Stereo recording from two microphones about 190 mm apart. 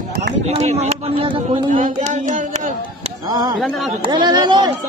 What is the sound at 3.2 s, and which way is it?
Speech, 20° right (ahead or behind).